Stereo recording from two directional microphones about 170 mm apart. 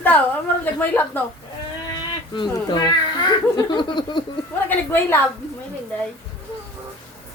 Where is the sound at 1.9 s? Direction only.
25° left (ahead or behind).